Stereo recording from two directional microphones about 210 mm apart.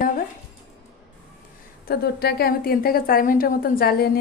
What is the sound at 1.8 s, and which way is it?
A woman's voice, 50° left (ahead or behind).